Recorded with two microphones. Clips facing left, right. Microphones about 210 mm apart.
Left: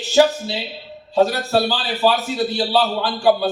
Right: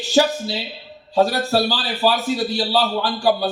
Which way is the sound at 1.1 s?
40° right (ahead or behind).